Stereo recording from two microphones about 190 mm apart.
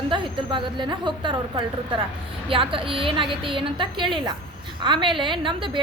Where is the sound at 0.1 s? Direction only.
25° right (ahead or behind).